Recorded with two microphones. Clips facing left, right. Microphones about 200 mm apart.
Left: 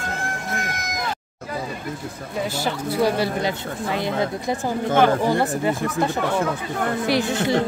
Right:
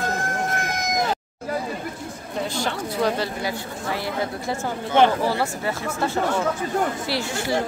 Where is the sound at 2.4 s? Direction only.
5° left (ahead or behind).